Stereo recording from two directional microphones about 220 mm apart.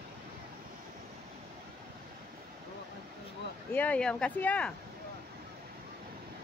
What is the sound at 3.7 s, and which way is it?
Speech, 5° left (ahead or behind).